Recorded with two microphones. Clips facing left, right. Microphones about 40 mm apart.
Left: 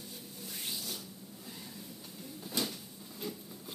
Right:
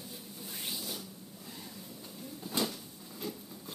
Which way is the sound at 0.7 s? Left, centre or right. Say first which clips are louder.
Right 1 dB; centre.